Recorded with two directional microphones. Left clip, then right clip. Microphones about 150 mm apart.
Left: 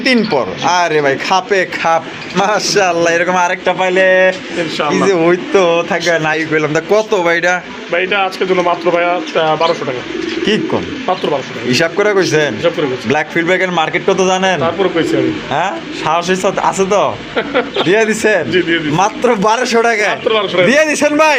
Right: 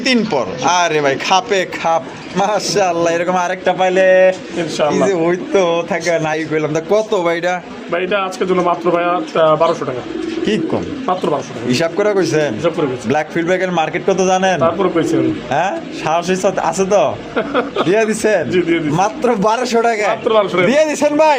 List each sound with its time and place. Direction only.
0.0 s a man's voice: 5° left (ahead or behind); by 4.4 s 15° right (ahead or behind)
5.0 s a man's voice: 5° left (ahead or behind); by 7.6 s 15° right (ahead or behind)
7.9 s speech: 90° right
10.4 s a man's voice: 10° right (ahead or behind)
14.6 s speech: 90° right
15.5 s a man's voice: 20° right (ahead or behind)
17.3 s speech: 90° right
17.8 s a man's voice: 15° right (ahead or behind)
20.2 s speech: 90° right
20.7 s a man's voice: 5° right (ahead or behind)